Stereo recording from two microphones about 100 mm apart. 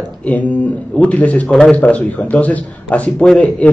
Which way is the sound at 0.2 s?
15° left (ahead or behind).